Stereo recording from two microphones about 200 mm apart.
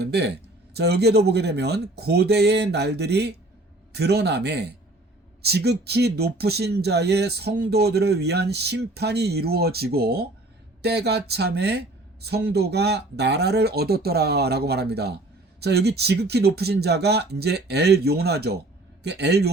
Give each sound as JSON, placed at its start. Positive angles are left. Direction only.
{"t": 0.0, "sound": "speech", "side_deg": -55}